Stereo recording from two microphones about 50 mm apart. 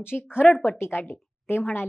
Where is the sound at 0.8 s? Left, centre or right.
Left.